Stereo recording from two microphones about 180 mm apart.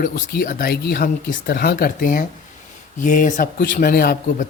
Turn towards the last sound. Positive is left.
turn(degrees=55)  # may be behind; listen again after turning